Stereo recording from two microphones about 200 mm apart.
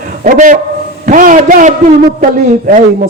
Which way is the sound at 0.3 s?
40° right (ahead or behind).